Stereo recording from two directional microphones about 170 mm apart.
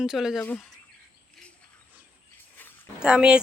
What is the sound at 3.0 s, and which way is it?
Speech, 5° right (ahead or behind).